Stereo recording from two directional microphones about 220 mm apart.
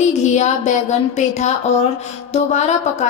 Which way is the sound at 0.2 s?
30° left (ahead or behind).